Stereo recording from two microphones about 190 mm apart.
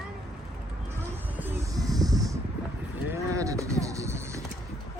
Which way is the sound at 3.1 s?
15° right (ahead or behind).